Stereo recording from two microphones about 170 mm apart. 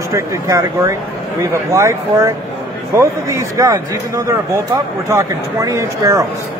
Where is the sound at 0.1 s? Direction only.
20° right (ahead or behind).